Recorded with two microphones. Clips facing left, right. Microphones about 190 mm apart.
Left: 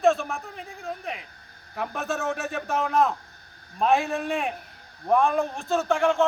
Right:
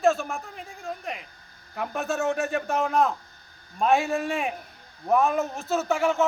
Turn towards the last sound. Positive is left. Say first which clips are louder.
# left 1 dB
turn(degrees=-5)  # may be behind; listen again after turning